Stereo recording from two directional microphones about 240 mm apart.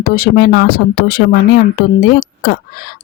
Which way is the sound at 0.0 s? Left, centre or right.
Left.